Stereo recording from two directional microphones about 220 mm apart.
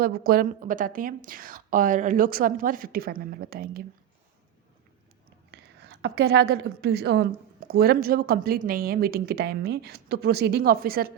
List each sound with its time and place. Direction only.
0.0 s a woman's voice: 45° right (ahead or behind)
5.5 s a woman's voice: 50° right (ahead or behind)